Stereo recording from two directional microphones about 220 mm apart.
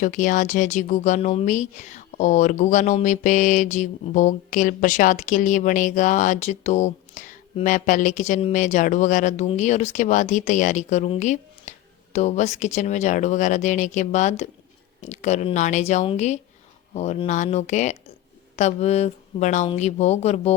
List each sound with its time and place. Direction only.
0.0 s speech: 35° left (ahead or behind)